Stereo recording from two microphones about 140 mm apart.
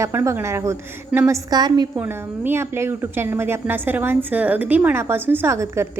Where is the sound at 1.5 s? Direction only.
30° right (ahead or behind).